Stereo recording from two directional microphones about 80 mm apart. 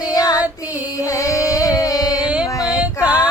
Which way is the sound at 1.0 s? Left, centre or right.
Left.